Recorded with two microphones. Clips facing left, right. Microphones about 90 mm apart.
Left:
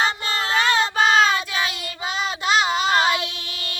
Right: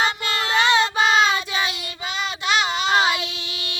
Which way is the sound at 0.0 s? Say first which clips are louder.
Even; centre (ahead or behind).